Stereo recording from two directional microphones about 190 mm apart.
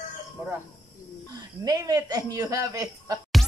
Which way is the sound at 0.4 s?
10° right (ahead or behind).